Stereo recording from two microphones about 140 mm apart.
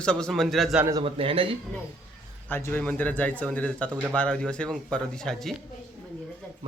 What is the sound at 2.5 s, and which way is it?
Speech, 15° left (ahead or behind).